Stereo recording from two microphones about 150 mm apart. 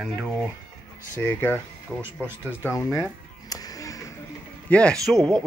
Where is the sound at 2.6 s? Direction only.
20° left (ahead or behind).